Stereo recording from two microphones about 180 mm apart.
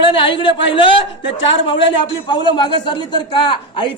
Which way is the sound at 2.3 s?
25° left (ahead or behind).